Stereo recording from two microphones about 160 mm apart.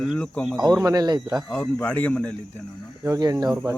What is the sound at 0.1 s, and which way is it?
Speech, 5° left (ahead or behind).